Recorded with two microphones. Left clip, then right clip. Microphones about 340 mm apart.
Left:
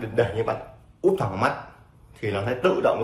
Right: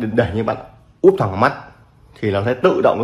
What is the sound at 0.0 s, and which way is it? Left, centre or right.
Speech, right.